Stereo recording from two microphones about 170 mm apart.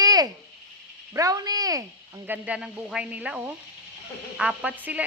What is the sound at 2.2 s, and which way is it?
Speech, 10° right (ahead or behind).